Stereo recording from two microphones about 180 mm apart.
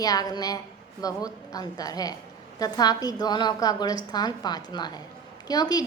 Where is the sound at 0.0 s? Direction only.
20° left (ahead or behind).